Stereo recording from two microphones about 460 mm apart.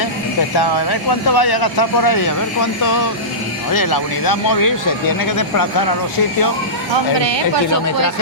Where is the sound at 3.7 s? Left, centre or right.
Left.